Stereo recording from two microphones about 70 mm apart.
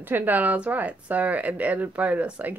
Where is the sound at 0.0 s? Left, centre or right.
Right.